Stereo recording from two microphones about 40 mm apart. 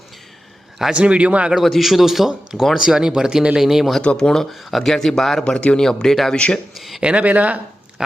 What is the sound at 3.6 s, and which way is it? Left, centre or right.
Speech, centre.